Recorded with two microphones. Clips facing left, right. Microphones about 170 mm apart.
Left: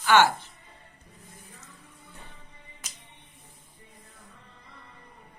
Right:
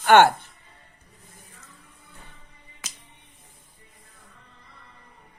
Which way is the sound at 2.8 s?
90° right.